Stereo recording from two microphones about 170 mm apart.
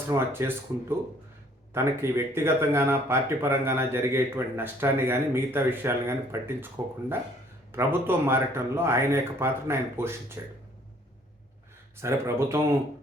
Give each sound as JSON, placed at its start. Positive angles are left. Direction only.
{"t": 0.1, "sound": "speech", "side_deg": -15}
{"t": 12.0, "sound": "speech", "side_deg": -15}